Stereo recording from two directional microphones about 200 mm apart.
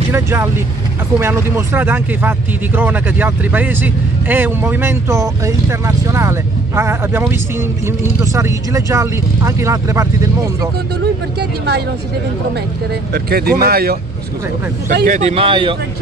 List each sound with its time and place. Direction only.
0.1 s speech: 15° right (ahead or behind)
13.1 s speech: 50° right (ahead or behind)
15.1 s speech: 35° right (ahead or behind)